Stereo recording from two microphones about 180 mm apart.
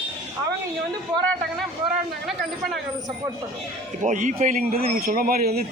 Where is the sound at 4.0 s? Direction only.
45° right (ahead or behind).